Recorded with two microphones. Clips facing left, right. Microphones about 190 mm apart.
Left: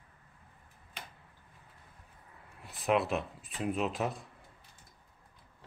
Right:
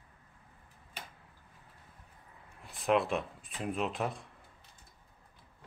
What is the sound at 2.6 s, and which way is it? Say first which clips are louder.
Speech: even; 5° left (ahead or behind).